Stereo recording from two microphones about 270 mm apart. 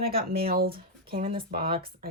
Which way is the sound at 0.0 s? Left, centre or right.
Right.